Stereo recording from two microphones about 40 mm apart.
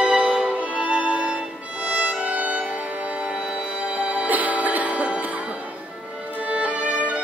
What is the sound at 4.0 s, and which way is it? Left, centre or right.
Music, right.